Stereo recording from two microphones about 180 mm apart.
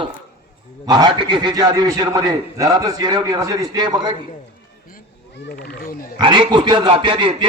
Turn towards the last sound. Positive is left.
turn(degrees=-30)  # may be behind; listen again after turning